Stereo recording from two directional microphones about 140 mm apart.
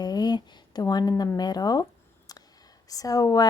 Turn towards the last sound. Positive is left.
turn(degrees=25)  # may be behind; listen again after turning